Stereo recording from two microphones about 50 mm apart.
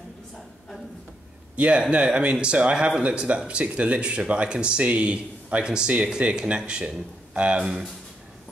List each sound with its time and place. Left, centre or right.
1.6 s speech: right